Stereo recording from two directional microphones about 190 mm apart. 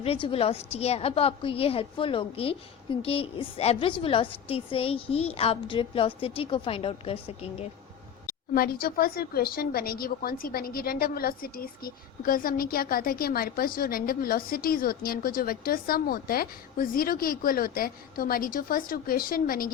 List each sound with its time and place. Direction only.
0.0 s a woman's voice: 30° left (ahead or behind)
8.3 s speech: 50° left (ahead or behind)